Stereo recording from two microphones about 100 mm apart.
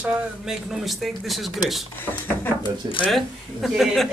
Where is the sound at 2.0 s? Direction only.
20° left (ahead or behind).